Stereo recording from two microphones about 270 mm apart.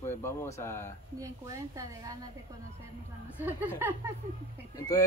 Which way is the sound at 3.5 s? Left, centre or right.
Centre.